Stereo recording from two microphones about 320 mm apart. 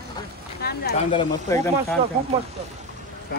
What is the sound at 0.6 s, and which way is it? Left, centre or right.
Speech, left.